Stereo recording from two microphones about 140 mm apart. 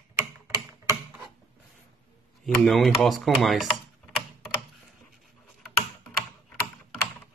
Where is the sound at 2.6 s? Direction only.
Centre (ahead or behind).